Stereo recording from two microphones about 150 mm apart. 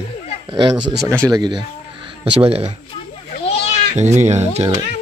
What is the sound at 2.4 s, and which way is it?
Speech, 40° right (ahead or behind).